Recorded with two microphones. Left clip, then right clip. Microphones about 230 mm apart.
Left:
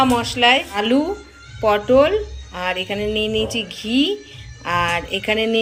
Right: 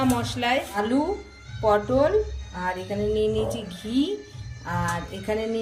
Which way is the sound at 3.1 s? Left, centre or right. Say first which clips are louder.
Left 3 dB; left.